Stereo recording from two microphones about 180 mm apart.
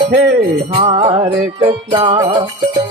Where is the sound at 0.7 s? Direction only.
35° right (ahead or behind).